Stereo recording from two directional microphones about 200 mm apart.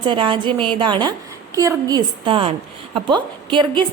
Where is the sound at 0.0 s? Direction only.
25° right (ahead or behind).